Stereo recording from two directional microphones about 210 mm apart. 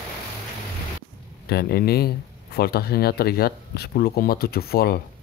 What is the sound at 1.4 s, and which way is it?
Speech, 50° left (ahead or behind).